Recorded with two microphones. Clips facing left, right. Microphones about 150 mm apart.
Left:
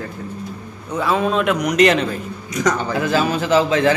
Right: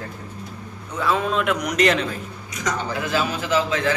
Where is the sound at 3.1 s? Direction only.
30° left (ahead or behind).